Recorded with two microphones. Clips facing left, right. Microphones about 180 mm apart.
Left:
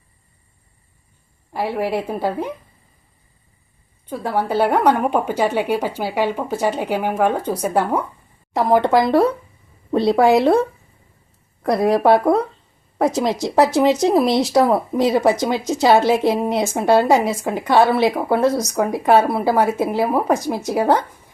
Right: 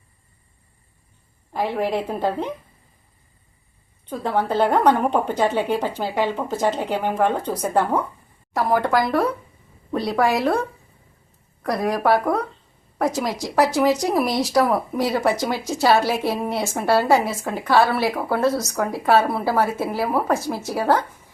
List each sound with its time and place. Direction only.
1.5 s a woman's voice: 10° left (ahead or behind)
4.1 s a woman's voice: 10° left (ahead or behind)
8.5 s speech: 25° left (ahead or behind)
11.6 s a woman's voice: 25° left (ahead or behind)